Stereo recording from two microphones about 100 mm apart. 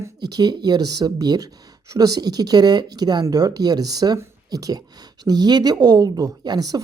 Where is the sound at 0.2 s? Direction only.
45° right (ahead or behind).